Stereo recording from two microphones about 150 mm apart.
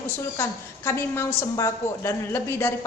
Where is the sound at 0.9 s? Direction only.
15° left (ahead or behind).